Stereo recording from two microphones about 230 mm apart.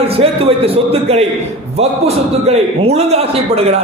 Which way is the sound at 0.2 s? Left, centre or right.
Right.